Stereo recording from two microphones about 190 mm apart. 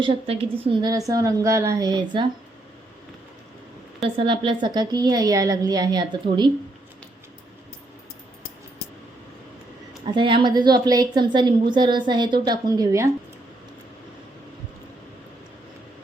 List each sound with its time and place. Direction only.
0.0 s a woman's voice: 30° right (ahead or behind)
4.0 s a woman's voice: 25° right (ahead or behind)
10.1 s a woman's voice: 25° right (ahead or behind)